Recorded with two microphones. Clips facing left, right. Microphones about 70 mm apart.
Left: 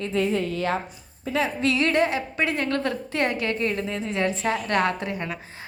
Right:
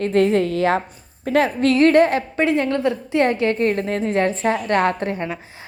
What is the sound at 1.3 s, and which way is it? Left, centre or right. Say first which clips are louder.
Speech: right 7 dB; right.